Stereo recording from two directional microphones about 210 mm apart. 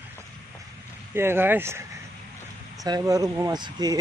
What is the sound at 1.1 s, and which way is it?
Speech, 10° right (ahead or behind).